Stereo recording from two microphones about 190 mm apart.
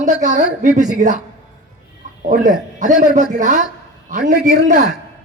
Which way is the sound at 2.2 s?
40° right (ahead or behind).